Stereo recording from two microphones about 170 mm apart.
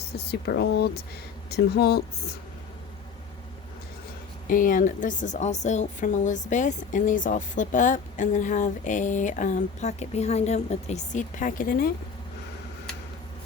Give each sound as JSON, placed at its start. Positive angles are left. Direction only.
{"t": 0.1, "sound": "speech", "side_deg": 75}
{"t": 4.4, "sound": "speech", "side_deg": 55}